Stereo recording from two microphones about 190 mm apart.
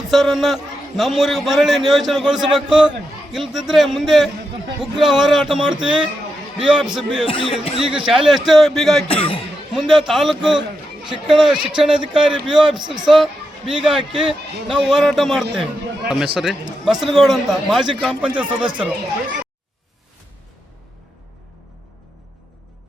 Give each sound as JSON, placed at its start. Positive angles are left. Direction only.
{"t": 0.1, "sound": "a man's voice", "side_deg": 0}
{"t": 7.3, "sound": "speech", "side_deg": 30}
{"t": 7.8, "sound": "a man's voice", "side_deg": -5}
{"t": 9.0, "sound": "speech", "side_deg": 30}
{"t": 9.7, "sound": "a man's voice", "side_deg": 0}